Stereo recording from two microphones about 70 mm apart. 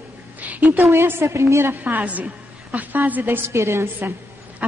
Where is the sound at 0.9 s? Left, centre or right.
Right.